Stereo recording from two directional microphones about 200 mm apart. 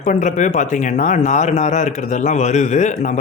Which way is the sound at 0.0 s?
40° left (ahead or behind).